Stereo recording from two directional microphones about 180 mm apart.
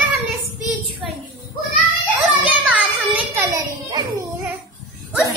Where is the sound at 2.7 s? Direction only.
10° right (ahead or behind).